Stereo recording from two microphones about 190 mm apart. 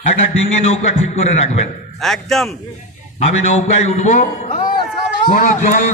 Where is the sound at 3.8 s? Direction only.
40° left (ahead or behind).